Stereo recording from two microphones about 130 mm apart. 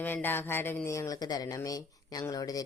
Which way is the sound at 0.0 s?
15° left (ahead or behind).